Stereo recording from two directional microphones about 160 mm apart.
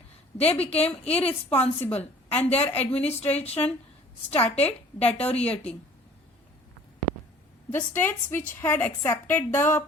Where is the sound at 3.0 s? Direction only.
40° left (ahead or behind).